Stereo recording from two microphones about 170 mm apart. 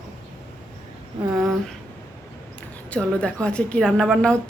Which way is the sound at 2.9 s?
5° left (ahead or behind).